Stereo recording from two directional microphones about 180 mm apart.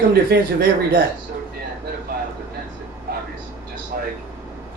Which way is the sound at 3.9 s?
55° right (ahead or behind).